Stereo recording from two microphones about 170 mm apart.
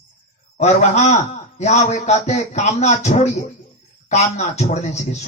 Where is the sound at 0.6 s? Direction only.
40° left (ahead or behind).